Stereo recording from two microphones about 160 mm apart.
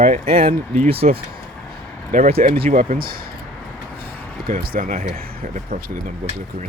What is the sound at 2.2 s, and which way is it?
Speech, 40° right (ahead or behind).